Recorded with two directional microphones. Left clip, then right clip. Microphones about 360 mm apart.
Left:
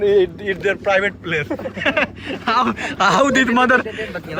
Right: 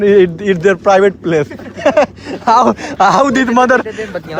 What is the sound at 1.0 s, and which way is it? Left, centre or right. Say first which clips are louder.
Speech: right 8 dB; centre.